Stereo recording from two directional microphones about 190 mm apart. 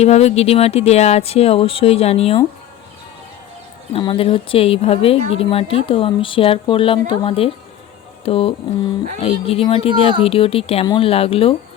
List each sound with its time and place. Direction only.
0.0 s speech: 35° left (ahead or behind)
3.9 s speech: 25° left (ahead or behind)